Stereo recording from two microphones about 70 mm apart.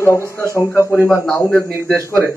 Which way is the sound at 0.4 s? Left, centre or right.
Left.